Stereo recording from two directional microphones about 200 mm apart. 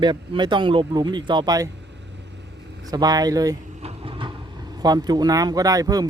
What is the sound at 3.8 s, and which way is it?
Vehicle, 30° right (ahead or behind).